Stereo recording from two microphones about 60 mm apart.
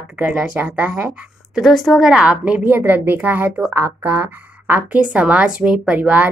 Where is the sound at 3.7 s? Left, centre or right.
Right.